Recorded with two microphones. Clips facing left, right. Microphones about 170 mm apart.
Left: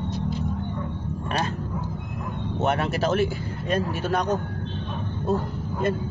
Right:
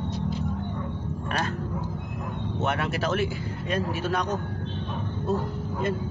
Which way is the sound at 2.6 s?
35° left (ahead or behind).